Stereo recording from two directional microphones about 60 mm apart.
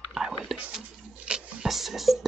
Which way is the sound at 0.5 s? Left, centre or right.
Centre.